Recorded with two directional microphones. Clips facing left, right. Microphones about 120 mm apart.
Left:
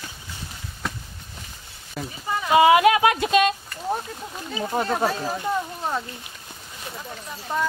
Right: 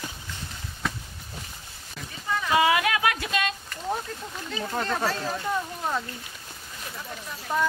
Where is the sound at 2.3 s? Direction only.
25° left (ahead or behind).